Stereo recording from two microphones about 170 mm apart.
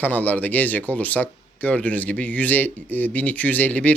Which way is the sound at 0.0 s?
10° left (ahead or behind).